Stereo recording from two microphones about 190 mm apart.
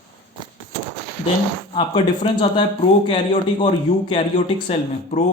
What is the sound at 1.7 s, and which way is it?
Speech, 25° left (ahead or behind).